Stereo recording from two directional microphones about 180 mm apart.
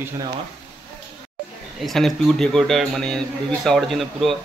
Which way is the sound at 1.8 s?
Centre (ahead or behind).